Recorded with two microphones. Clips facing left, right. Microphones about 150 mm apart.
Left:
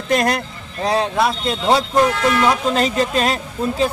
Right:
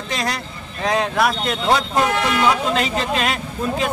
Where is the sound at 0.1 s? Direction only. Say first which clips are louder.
Left 8 dB; 55° left (ahead or behind).